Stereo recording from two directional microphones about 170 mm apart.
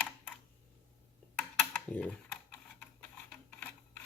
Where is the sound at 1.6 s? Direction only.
5° left (ahead or behind).